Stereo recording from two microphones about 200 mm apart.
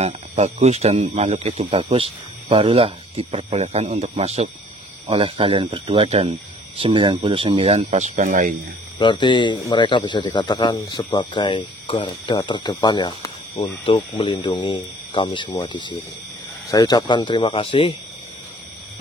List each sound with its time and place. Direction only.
0.0 s speech: 35° right (ahead or behind)
8.9 s speech: 25° left (ahead or behind)